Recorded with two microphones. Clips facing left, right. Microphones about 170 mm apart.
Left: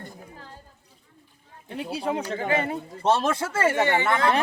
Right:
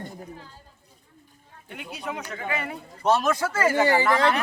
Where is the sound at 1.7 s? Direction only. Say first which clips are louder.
Left 6 dB; 30° left (ahead or behind).